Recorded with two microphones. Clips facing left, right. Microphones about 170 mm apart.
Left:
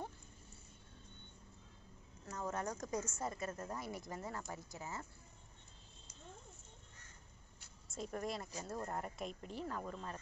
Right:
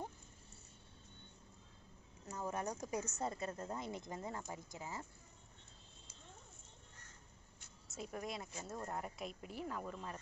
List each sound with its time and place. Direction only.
2.3 s speech: 15° right (ahead or behind)
3.2 s speech: 25° right (ahead or behind)
7.9 s speech: 5° right (ahead or behind)